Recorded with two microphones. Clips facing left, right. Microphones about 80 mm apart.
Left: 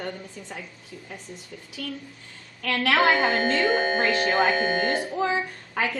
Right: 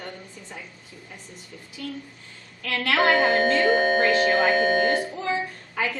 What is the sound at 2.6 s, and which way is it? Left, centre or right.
Speech, left.